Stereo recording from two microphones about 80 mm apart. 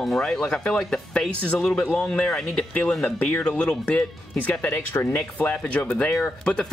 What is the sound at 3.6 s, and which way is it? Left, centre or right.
Speech, left.